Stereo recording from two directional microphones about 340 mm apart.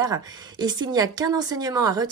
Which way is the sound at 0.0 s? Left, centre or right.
Centre.